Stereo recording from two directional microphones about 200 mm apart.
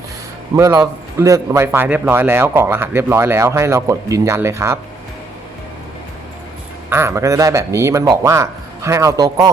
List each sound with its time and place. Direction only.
0.5 s a man's voice: 15° right (ahead or behind)
6.9 s a man's voice: 15° right (ahead or behind)